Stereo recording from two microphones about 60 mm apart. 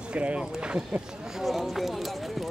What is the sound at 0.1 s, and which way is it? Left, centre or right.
Speech, centre.